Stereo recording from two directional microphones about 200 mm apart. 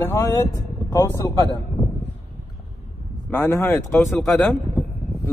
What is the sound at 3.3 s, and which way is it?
Speech, 15° left (ahead or behind).